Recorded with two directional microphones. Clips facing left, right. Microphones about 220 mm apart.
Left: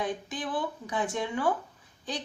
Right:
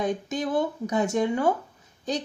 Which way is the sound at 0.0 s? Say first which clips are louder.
Right 6 dB; 45° right (ahead or behind).